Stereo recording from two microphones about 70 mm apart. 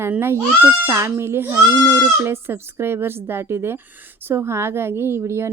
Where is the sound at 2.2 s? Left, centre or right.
Right.